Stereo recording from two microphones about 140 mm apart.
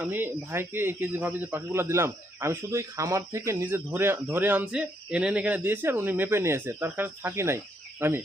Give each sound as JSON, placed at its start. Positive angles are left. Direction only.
{"t": 0.0, "sound": "a man's voice", "side_deg": -15}